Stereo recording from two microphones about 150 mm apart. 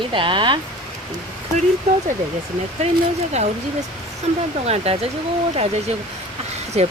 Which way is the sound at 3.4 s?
45° right (ahead or behind).